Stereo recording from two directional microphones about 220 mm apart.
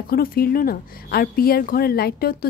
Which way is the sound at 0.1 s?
40° left (ahead or behind).